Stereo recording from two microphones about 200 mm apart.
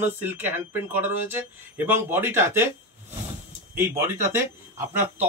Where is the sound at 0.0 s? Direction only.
10° right (ahead or behind).